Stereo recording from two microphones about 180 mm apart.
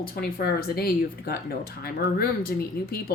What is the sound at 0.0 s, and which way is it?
A woman's voice, 60° left (ahead or behind).